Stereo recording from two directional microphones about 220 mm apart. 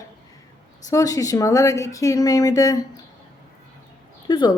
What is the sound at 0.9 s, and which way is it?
Speech, 15° left (ahead or behind).